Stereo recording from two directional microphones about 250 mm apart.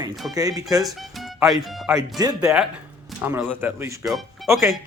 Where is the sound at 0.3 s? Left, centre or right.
Centre.